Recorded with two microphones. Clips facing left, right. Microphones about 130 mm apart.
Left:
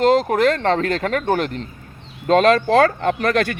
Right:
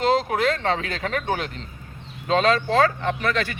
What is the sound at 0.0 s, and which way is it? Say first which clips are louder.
Speech: left 5 dB; 45° left (ahead or behind).